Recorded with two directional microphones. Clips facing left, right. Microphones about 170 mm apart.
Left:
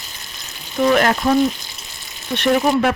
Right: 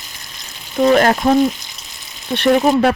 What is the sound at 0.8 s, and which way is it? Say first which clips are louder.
Speech: right 3 dB; 35° right (ahead or behind).